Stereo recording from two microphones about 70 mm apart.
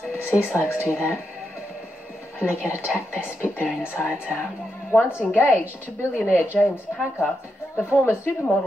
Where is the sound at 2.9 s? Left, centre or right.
Left.